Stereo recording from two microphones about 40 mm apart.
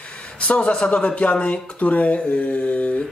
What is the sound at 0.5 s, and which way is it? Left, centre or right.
A man's voice, left.